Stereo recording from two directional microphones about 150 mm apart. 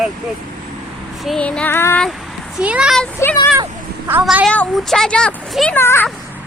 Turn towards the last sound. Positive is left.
turn(degrees=15)  # may be behind; listen again after turning